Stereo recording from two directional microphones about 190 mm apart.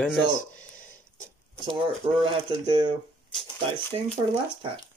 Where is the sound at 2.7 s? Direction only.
25° right (ahead or behind).